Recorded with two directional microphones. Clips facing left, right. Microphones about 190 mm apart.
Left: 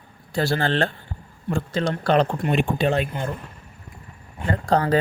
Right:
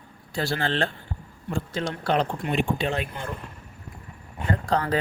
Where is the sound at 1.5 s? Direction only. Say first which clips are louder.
Left 5 dB; 75° left (ahead or behind).